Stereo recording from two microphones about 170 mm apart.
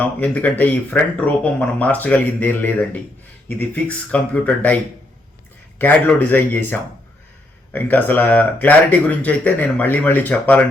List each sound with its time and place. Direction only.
0.0 s speech: 10° left (ahead or behind)
5.8 s speech: 10° left (ahead or behind)